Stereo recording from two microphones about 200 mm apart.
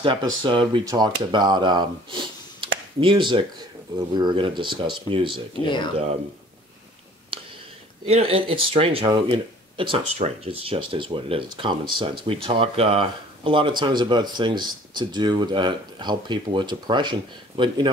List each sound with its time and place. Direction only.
0.0 s speech: 25° right (ahead or behind)
8.1 s speech: 30° right (ahead or behind)